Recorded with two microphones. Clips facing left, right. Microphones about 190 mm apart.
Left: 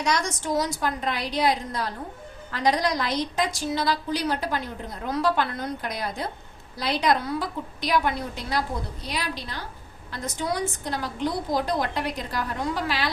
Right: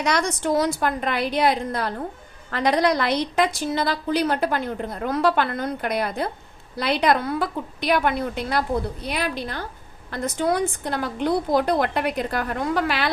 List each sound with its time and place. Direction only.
0.0 s a woman's voice: 60° right (ahead or behind)